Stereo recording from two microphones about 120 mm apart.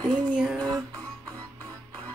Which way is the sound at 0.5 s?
35° right (ahead or behind).